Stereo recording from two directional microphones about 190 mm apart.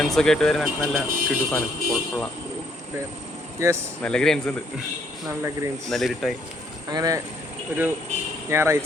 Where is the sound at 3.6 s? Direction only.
15° right (ahead or behind).